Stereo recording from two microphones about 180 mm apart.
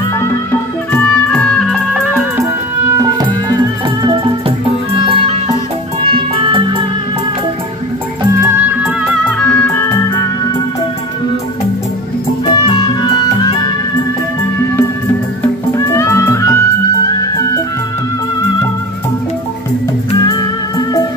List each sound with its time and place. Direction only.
0.2 s music: 15° left (ahead or behind)
4.0 s music: 25° right (ahead or behind)
8.4 s music: 10° right (ahead or behind)
9.2 s music: 5° left (ahead or behind)
12.7 s music: 25° left (ahead or behind)
15.7 s music: 15° left (ahead or behind)
20.1 s music: 20° left (ahead or behind)